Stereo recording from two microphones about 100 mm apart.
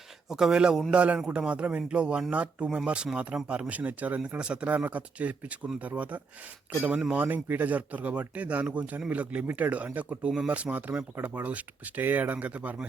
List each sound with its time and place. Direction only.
0.3 s speech: 5° right (ahead or behind)